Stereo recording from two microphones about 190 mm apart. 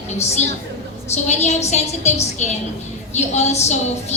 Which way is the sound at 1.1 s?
35° left (ahead or behind).